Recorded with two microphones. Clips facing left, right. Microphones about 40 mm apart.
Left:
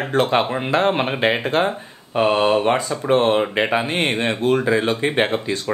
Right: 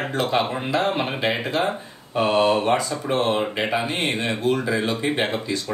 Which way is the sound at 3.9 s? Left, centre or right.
Left.